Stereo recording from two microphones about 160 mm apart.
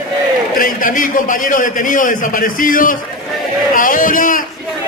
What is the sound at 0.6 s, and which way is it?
A man's voice, 60° left (ahead or behind).